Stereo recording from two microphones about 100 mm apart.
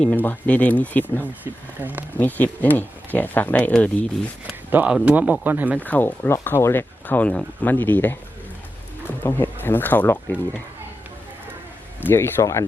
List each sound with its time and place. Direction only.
0.0 s speech: 15° left (ahead or behind)
1.8 s speech: 15° right (ahead or behind)
2.1 s speech: 15° left (ahead or behind)
4.7 s speech: 15° right (ahead or behind)
5.8 s speech: 15° left (ahead or behind)
12.0 s speech: 25° left (ahead or behind)